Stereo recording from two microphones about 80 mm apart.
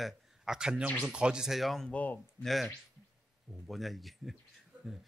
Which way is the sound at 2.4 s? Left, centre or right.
Centre.